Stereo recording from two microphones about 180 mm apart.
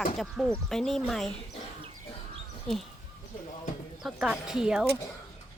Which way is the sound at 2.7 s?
Centre (ahead or behind).